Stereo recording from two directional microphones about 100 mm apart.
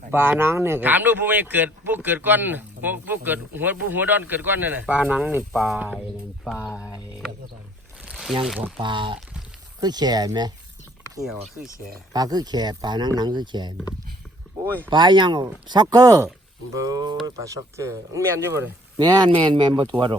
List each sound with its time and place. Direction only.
0.1 s speech: 20° right (ahead or behind)
5.7 s a sound: 15° right (ahead or behind)
6.4 s speech: centre (ahead or behind)
8.1 s a sound: centre (ahead or behind)
8.8 s speech: 55° right (ahead or behind)
9.8 s speech: 45° right (ahead or behind)
12.1 s speech: 40° right (ahead or behind)
14.8 s speech: 50° right (ahead or behind); by 18.7 s 30° right (ahead or behind)
18.9 s speech: 45° right (ahead or behind)